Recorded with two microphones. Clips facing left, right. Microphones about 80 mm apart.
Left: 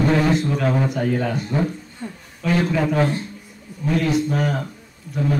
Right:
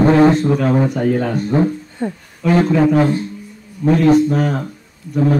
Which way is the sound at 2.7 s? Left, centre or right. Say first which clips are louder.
Right 7 dB; centre.